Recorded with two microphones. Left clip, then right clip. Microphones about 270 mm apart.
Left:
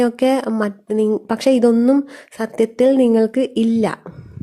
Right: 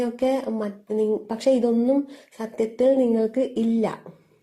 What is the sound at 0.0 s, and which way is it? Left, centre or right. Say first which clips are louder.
Speech: left 7 dB; left.